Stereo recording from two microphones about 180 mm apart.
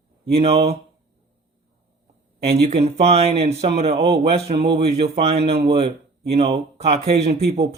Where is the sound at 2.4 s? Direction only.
35° right (ahead or behind).